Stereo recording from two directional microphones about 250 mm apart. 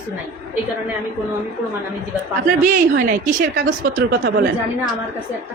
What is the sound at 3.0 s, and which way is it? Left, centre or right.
Speech, right.